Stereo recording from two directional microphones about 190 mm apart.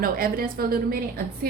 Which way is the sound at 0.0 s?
50° right (ahead or behind).